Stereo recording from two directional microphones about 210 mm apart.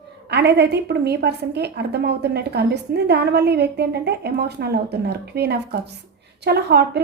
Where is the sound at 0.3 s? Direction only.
50° right (ahead or behind).